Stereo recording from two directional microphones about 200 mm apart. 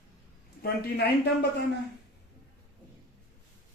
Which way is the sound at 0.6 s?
50° left (ahead or behind).